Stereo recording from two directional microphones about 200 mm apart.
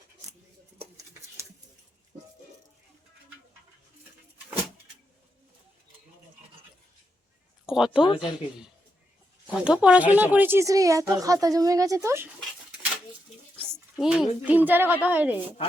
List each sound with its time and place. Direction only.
7.7 s speech: 5° right (ahead or behind)
8.0 s speech: 25° left (ahead or behind)
9.6 s speech: 5° right (ahead or behind)
14.0 s speech: 5° right (ahead or behind)